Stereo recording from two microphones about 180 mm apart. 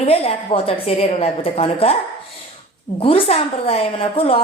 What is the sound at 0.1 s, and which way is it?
A woman's voice, 30° left (ahead or behind).